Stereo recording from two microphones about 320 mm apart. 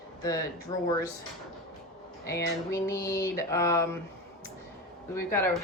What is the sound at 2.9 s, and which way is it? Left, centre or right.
Speech, centre.